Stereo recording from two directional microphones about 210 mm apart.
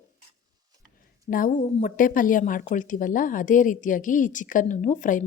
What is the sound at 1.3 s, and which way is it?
Speech, 40° left (ahead or behind).